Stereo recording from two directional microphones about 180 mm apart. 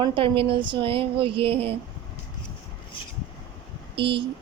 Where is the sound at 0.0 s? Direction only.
30° right (ahead or behind).